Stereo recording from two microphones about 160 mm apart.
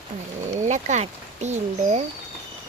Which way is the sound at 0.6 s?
50° right (ahead or behind).